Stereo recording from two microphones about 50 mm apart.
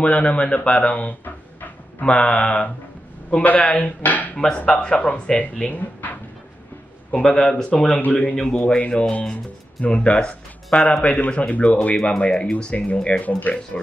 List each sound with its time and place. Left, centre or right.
0.0 s speech: left
1.2 s a sound: left
2.0 s speech: left
4.6 s speech: centre
5.7 s speech: left
7.1 s speech: centre; by 13.6 s left